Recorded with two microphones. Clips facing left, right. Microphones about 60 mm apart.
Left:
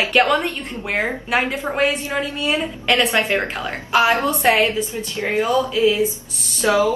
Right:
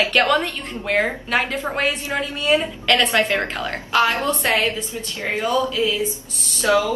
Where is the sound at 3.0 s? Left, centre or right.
Centre.